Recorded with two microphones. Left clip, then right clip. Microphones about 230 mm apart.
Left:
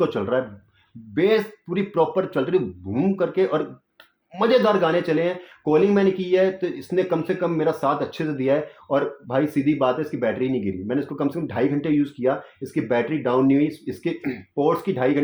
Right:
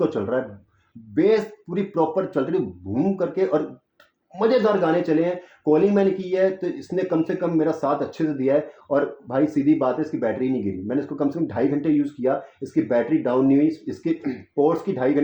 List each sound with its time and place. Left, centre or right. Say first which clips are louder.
0.2 s speech: left 1 dB; left